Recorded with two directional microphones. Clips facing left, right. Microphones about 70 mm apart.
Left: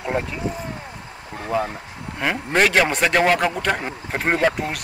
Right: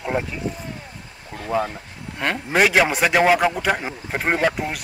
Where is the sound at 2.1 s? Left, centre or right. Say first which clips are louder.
Even; centre.